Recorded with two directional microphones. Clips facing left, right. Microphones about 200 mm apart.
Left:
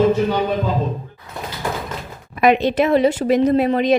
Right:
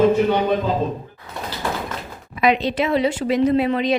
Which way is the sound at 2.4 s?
50° left (ahead or behind).